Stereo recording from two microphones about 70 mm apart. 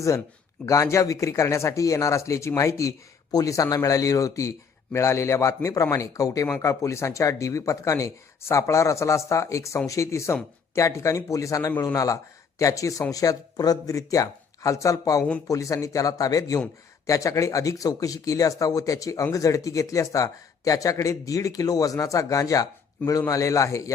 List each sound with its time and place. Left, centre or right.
0.6 s a man's voice: left